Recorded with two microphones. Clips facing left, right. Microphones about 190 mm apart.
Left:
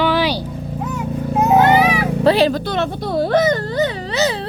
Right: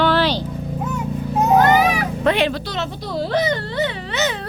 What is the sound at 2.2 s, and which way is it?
Speech, 35° left (ahead or behind).